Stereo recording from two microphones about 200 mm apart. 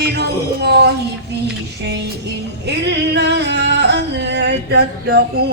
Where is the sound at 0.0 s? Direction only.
55° right (ahead or behind).